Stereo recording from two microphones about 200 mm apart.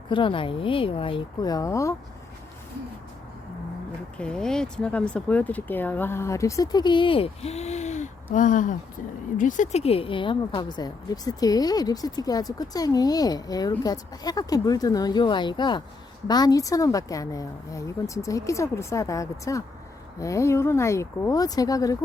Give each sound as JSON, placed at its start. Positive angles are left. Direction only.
{"t": 0.1, "sound": "speech", "side_deg": 25}
{"t": 4.2, "sound": "speech", "side_deg": 5}